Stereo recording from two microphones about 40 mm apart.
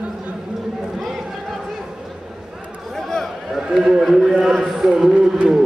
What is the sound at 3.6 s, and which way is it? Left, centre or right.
Run, centre.